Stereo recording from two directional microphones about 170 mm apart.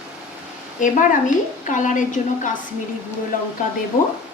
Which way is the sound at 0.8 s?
50° left (ahead or behind).